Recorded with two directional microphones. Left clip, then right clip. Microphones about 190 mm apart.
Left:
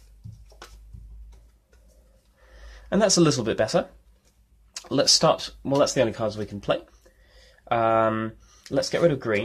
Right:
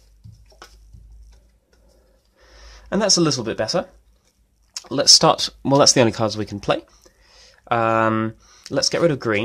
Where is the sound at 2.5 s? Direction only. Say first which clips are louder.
Right 4 dB; 25° right (ahead or behind).